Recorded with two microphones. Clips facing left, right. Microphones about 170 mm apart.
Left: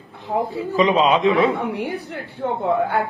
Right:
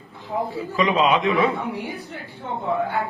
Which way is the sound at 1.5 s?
65° left (ahead or behind).